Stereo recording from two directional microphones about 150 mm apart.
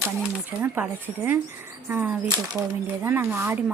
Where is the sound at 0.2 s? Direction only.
10° right (ahead or behind).